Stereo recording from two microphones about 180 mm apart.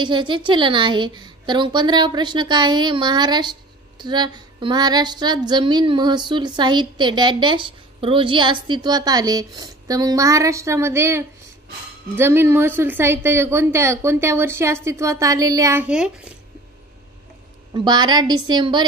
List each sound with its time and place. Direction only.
0.0 s female singing: 25° right (ahead or behind)
12.2 s a woman's voice: 15° right (ahead or behind)
17.7 s female singing: 25° right (ahead or behind)